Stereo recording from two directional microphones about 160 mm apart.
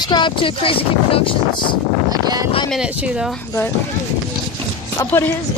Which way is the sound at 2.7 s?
5° right (ahead or behind).